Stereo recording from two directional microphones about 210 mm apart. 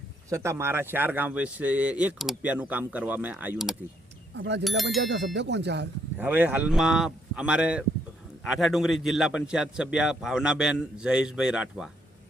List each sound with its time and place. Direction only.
0.3 s a man's voice: 10° right (ahead or behind)
4.4 s speech: 55° right (ahead or behind)
4.8 s a man's voice: centre (ahead or behind)
5.0 s speech: 55° right (ahead or behind)
6.1 s a man's voice: 10° right (ahead or behind)